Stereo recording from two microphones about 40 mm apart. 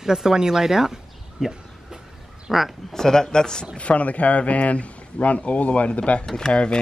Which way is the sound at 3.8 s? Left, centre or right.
Left.